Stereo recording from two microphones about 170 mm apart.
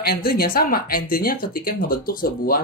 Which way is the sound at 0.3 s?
60° left (ahead or behind).